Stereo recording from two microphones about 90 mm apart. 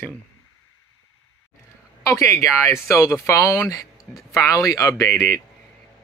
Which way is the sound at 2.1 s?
35° left (ahead or behind).